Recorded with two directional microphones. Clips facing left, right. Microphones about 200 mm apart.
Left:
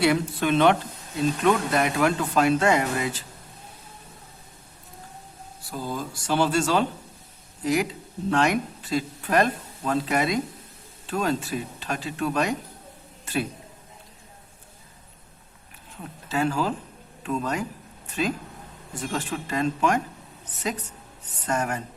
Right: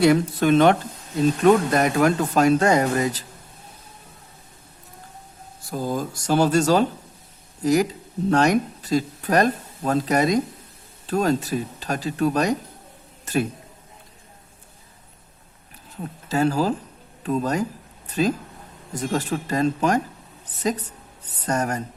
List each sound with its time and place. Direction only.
0.0 s speech: 40° right (ahead or behind)
5.7 s speech: 45° right (ahead or behind)
16.3 s speech: 40° right (ahead or behind)
21.4 s speech: 40° right (ahead or behind)